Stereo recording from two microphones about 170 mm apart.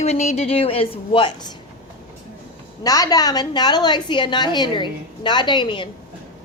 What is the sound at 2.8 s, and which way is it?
A woman's voice, 20° left (ahead or behind).